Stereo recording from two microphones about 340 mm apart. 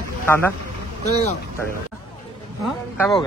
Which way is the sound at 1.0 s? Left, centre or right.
Centre.